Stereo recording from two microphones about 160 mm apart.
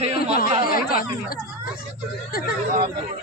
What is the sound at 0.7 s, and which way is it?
Speech, 65° left (ahead or behind).